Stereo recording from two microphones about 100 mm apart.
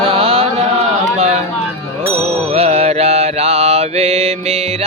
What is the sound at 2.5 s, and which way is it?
Mantra, 90° right.